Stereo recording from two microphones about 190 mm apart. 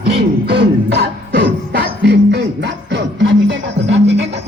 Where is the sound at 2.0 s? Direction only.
65° right (ahead or behind).